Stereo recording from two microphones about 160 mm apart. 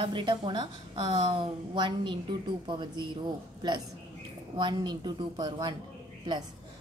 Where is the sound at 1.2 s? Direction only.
35° right (ahead or behind).